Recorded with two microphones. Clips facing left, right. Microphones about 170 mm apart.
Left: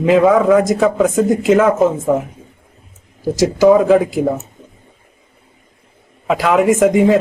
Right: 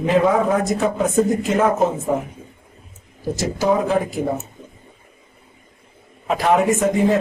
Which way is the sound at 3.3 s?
90° left.